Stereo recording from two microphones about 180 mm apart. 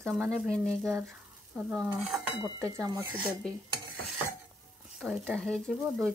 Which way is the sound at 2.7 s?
15° right (ahead or behind).